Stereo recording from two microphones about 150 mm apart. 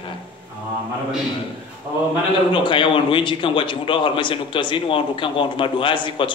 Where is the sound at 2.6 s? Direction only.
35° left (ahead or behind).